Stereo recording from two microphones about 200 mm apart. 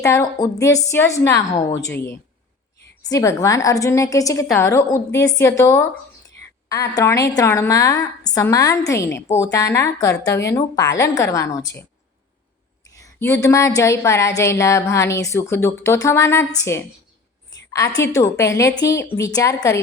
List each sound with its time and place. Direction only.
0.0 s a woman's voice: 15° left (ahead or behind)
17.7 s a sound: 15° left (ahead or behind)
18.0 s a woman's voice: 15° left (ahead or behind)